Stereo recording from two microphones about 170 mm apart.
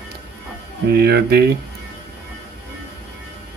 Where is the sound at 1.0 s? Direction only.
70° right (ahead or behind).